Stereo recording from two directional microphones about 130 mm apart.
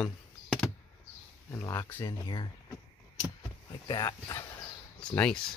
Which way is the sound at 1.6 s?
30° left (ahead or behind).